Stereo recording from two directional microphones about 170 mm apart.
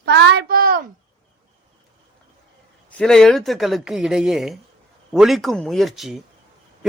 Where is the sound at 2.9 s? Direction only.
5° left (ahead or behind).